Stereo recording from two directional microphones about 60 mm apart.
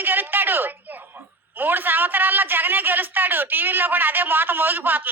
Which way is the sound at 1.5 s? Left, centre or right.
Right.